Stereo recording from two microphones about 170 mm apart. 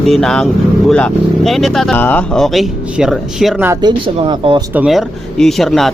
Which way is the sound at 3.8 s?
25° right (ahead or behind).